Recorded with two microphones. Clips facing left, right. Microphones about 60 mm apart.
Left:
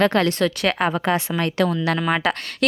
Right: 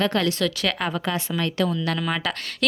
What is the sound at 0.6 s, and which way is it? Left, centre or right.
Speech, left.